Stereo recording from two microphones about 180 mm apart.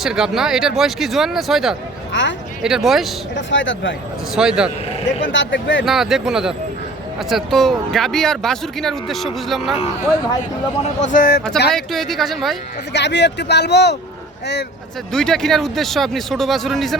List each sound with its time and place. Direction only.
0.0 s a man's voice: 5° right (ahead or behind)
2.1 s speech: 90° left
2.6 s a man's voice: centre (ahead or behind)
3.3 s speech: 90° left
4.4 s a man's voice: 5° right (ahead or behind)
5.2 s speech: 90° left
5.8 s a man's voice: centre (ahead or behind)
11.0 s speech: 50° left (ahead or behind)
11.7 s a man's voice: centre (ahead or behind)
12.9 s speech: 75° left (ahead or behind)
15.1 s a man's voice: 5° left (ahead or behind)